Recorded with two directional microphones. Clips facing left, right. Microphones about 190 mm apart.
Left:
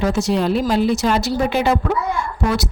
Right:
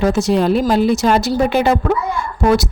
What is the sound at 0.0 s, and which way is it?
A woman's voice, 50° right (ahead or behind).